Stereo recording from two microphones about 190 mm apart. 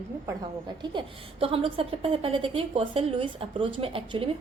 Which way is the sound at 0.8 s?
25° right (ahead or behind).